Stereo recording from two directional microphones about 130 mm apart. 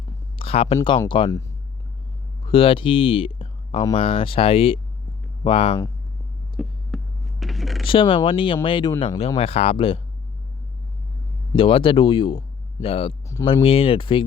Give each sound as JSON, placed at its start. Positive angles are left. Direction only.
{"t": 0.3, "sound": "a sound", "side_deg": 45}
{"t": 0.9, "sound": "speech", "side_deg": 40}
{"t": 2.5, "sound": "speech", "side_deg": 45}
{"t": 6.6, "sound": "a sound", "side_deg": 0}
{"t": 7.9, "sound": "speech", "side_deg": 40}
{"t": 9.0, "sound": "speech", "side_deg": 50}
{"t": 11.5, "sound": "speech", "side_deg": 45}